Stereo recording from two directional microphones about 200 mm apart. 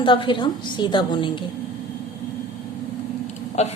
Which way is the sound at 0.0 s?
25° left (ahead or behind).